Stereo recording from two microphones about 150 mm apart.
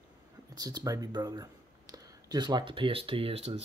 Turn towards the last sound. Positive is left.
turn(degrees=-40)  # may be behind; listen again after turning